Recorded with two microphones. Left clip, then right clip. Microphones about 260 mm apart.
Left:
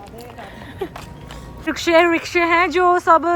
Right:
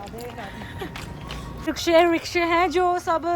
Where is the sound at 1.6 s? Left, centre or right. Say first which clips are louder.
Left 3 dB; centre.